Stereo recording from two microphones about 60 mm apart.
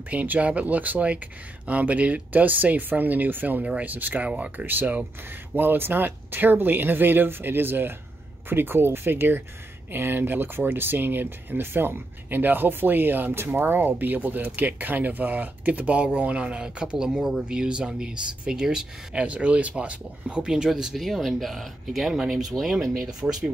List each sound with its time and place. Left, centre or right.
0.1 s speech: right
19.2 s speech: right; by 22.8 s centre
23.2 s speech: right